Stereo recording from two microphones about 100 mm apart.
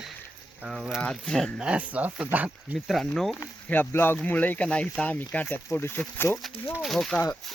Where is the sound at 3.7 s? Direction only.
20° left (ahead or behind).